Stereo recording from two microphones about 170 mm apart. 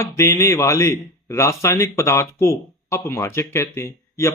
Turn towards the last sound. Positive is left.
turn(degrees=15)  # may be behind; listen again after turning